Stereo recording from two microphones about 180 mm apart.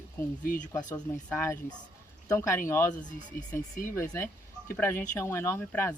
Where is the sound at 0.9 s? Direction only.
5° left (ahead or behind).